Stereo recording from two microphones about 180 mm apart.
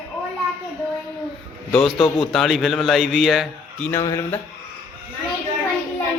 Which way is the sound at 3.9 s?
15° left (ahead or behind).